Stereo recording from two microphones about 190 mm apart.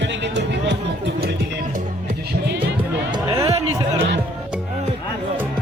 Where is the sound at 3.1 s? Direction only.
25° right (ahead or behind).